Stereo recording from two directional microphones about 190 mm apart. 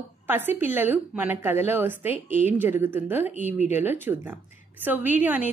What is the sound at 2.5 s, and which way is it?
A woman's voice, 10° right (ahead or behind).